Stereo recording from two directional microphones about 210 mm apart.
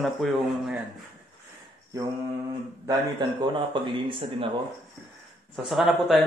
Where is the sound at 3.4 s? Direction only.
20° right (ahead or behind).